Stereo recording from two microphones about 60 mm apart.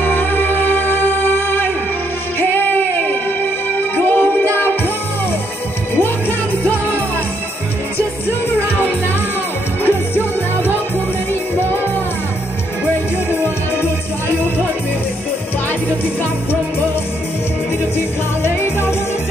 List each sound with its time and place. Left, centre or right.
0.0 s music: left
5.9 s music: left
9.8 s music: left
13.3 s music: left
17.9 s music: left